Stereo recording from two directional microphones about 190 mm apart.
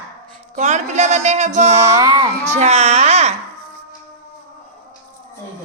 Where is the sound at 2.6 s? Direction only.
35° right (ahead or behind).